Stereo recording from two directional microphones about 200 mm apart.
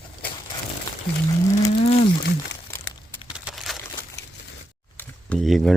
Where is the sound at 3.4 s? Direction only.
Centre (ahead or behind).